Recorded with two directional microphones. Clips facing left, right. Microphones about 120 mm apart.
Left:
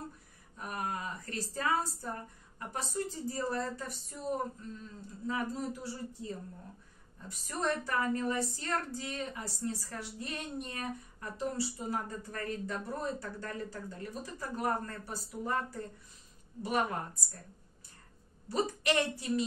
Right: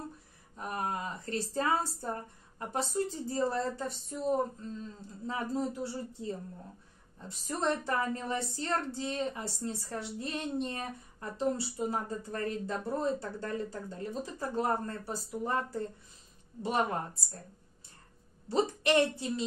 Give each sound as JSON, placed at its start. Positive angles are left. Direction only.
{"t": 0.6, "sound": "speech", "side_deg": -30}
{"t": 5.2, "sound": "speech", "side_deg": -30}
{"t": 16.6, "sound": "speech", "side_deg": -30}
{"t": 18.5, "sound": "speech", "side_deg": -25}